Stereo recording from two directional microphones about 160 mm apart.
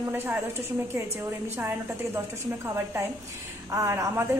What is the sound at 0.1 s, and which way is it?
A woman's voice, 15° right (ahead or behind).